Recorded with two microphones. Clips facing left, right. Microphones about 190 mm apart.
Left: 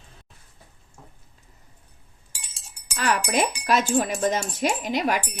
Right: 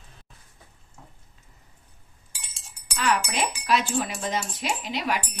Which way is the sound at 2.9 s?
45° left (ahead or behind).